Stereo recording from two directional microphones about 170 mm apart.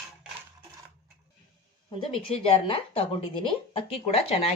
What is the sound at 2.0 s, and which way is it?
Speech, 35° left (ahead or behind).